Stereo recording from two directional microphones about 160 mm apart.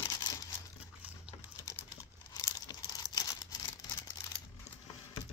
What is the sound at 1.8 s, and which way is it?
Tearing, 20° left (ahead or behind).